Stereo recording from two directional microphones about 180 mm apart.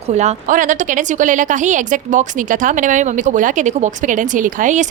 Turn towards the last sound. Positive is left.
turn(degrees=-45)  # may be behind; listen again after turning